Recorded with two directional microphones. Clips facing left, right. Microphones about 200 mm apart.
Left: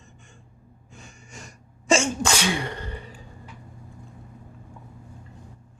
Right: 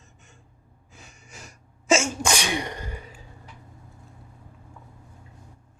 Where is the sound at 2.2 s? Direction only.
15° right (ahead or behind).